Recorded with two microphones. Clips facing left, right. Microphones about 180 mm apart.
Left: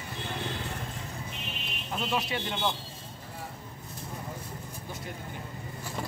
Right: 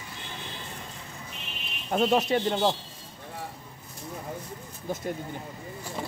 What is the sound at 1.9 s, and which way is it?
Speech, 45° right (ahead or behind).